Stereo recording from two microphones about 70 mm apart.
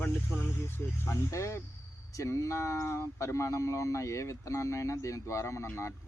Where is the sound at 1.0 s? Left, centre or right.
Left.